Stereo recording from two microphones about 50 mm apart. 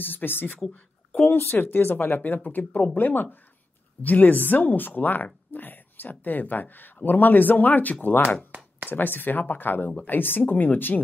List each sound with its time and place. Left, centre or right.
0.0 s a woman's voice: left
8.5 s a sound: right
8.9 s speech: left